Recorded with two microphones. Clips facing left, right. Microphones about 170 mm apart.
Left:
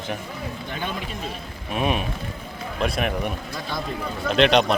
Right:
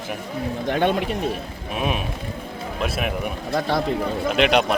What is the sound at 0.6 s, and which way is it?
Speech, 65° right (ahead or behind).